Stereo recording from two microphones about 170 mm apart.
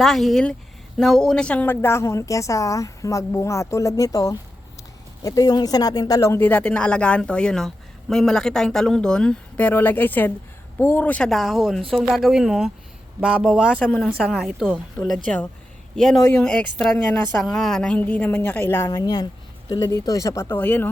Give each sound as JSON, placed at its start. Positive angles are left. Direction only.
{"t": 0.0, "sound": "a woman's voice", "side_deg": 0}